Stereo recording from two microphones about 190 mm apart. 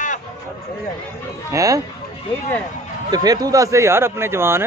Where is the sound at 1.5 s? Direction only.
15° right (ahead or behind).